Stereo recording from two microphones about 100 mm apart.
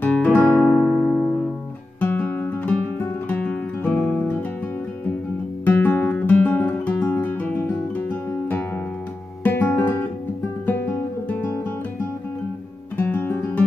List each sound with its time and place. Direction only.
0.0 s music: 15° left (ahead or behind)
0.7 s music: 5° left (ahead or behind)
2.0 s music: 15° left (ahead or behind)
5.7 s guitar: 20° left (ahead or behind)
9.4 s music: 20° left (ahead or behind)
12.9 s guitar: 20° left (ahead or behind)